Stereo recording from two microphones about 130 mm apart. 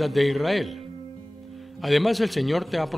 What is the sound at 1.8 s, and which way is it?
A man's voice, centre (ahead or behind).